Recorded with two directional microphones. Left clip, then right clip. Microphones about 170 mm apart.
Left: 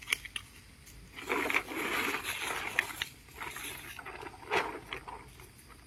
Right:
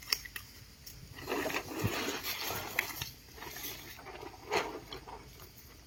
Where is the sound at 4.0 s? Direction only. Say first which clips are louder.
Left 3 dB; 15° right (ahead or behind).